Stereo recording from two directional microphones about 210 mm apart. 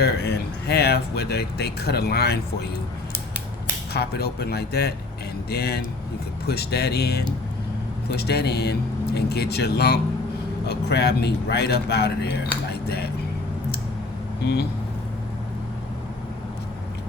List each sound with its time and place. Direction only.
0.0 s speech: 50° left (ahead or behind)
3.9 s speech: 50° left (ahead or behind)
12.7 s a sound: 50° left (ahead or behind)
14.4 s speech: 50° left (ahead or behind)